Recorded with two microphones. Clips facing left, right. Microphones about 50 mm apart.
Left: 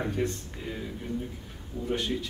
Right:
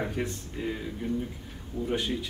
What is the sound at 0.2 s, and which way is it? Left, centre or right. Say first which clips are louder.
Speech: left 5 dB; centre.